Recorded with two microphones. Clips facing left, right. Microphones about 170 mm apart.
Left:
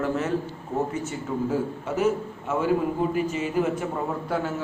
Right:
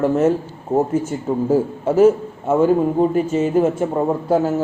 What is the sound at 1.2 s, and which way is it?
A man's voice, 40° right (ahead or behind).